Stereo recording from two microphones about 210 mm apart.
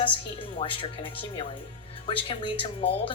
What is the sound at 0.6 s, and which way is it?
A woman's voice, 25° left (ahead or behind).